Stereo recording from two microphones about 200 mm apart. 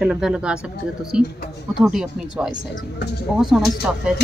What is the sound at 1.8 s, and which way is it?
Speech, 5° right (ahead or behind).